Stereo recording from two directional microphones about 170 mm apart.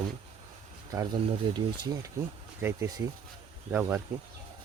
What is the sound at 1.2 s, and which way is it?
Speech, 30° right (ahead or behind).